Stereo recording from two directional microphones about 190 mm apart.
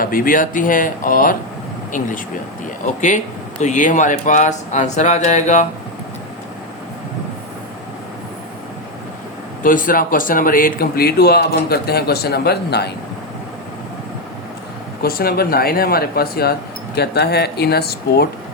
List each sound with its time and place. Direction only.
0.0 s speech: 50° left (ahead or behind)
9.6 s speech: 45° left (ahead or behind)
15.0 s speech: 55° left (ahead or behind)